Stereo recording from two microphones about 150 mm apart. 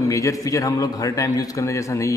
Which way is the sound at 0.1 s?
20° left (ahead or behind).